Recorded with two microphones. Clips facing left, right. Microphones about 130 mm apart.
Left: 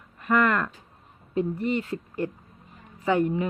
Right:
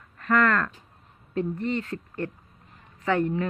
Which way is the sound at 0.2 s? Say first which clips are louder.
Even; 10° left (ahead or behind).